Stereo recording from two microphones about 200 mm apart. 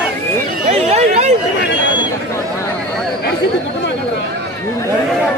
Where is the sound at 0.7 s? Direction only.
30° right (ahead or behind).